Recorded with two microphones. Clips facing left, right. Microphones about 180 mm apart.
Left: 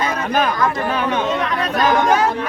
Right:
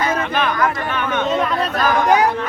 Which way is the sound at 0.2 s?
40° left (ahead or behind).